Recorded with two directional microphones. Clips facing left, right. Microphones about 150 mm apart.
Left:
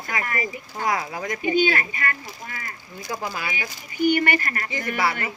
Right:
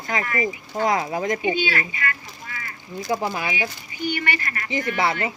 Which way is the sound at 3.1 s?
20° right (ahead or behind).